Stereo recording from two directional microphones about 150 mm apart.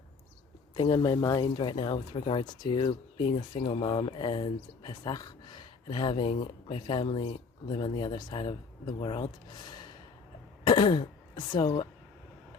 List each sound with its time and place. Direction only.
0.8 s speech: 30° left (ahead or behind)
10.7 s speech: 30° left (ahead or behind)